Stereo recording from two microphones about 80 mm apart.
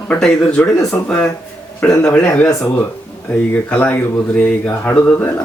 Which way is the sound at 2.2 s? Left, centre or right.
Centre.